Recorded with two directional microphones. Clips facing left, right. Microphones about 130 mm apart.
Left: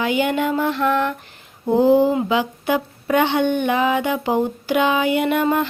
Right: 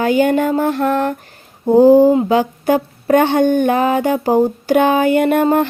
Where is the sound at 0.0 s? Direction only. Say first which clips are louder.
Right 6 dB; 40° right (ahead or behind).